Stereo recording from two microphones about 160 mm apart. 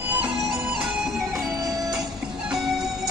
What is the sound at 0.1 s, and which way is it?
Music, centre (ahead or behind).